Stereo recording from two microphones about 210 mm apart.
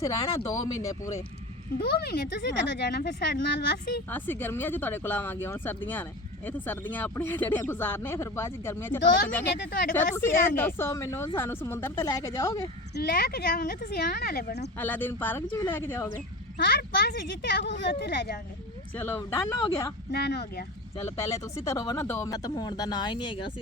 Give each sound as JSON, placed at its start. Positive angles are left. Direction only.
{"t": 0.0, "sound": "speech", "side_deg": 15}
{"t": 2.0, "sound": "speech", "side_deg": 50}
{"t": 4.1, "sound": "speech", "side_deg": 10}
{"t": 12.9, "sound": "speech", "side_deg": 45}
{"t": 14.8, "sound": "speech", "side_deg": 10}
{"t": 16.6, "sound": "speech", "side_deg": 50}
{"t": 18.9, "sound": "speech", "side_deg": 10}
{"t": 20.1, "sound": "speech", "side_deg": 50}
{"t": 21.2, "sound": "speech", "side_deg": 15}